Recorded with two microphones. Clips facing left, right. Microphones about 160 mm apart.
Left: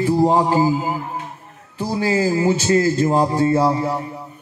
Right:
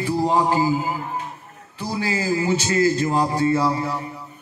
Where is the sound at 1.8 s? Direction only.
35° left (ahead or behind).